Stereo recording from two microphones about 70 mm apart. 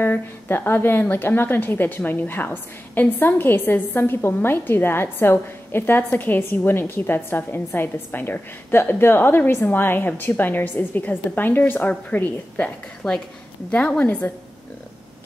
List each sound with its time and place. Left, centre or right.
0.0 s a woman's voice: left
13.0 s a woman's voice: centre